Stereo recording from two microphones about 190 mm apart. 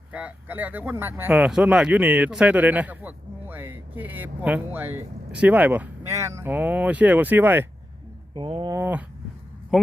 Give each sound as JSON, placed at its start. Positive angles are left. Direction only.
{"t": 0.1, "sound": "speech", "side_deg": -10}
{"t": 8.4, "sound": "speech", "side_deg": -25}